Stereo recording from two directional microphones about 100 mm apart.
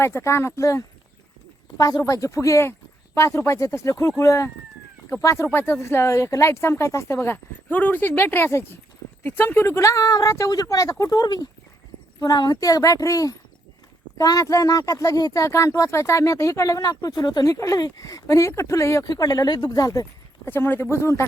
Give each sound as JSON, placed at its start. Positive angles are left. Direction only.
{"t": 0.0, "sound": "speech", "side_deg": 25}
{"t": 19.1, "sound": "speech", "side_deg": 40}
{"t": 20.4, "sound": "speech", "side_deg": 20}